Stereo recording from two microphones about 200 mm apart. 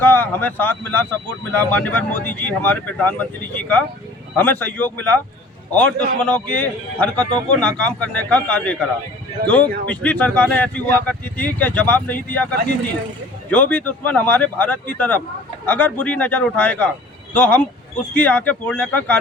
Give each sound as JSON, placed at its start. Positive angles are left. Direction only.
{"t": 0.0, "sound": "speech", "side_deg": 10}
{"t": 6.2, "sound": "speech", "side_deg": 5}
{"t": 13.5, "sound": "speech", "side_deg": 5}